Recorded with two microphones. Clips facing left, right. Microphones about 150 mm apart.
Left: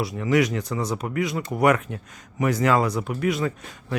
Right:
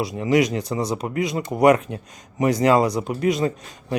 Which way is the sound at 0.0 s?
15° right (ahead or behind).